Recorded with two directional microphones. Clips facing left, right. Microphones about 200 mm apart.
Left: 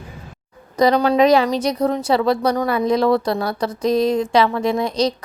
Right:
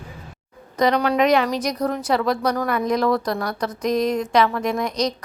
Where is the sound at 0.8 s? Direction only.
30° left (ahead or behind).